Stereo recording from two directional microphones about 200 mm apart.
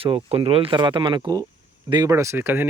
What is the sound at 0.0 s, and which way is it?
Speech, 30° right (ahead or behind).